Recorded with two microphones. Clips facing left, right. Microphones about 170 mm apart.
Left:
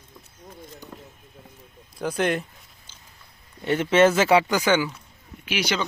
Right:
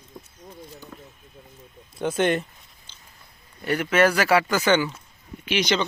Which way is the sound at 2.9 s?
10° left (ahead or behind).